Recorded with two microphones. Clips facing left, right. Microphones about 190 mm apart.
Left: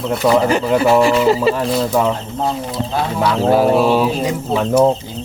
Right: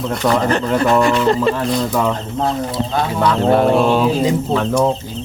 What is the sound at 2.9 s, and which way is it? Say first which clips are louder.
Speech: even; 10° left (ahead or behind).